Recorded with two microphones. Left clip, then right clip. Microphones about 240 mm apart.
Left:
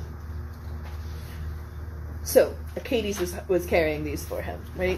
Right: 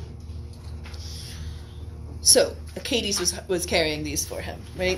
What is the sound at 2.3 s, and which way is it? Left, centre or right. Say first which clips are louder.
A woman's voice: left 2 dB; right.